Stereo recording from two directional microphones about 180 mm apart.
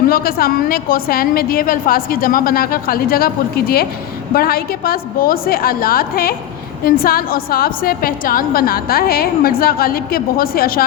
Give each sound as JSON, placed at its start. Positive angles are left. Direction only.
{"t": 0.1, "sound": "a woman's voice", "side_deg": 55}